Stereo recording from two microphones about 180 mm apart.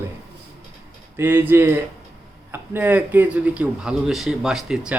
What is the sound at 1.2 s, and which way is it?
Speech, 10° right (ahead or behind).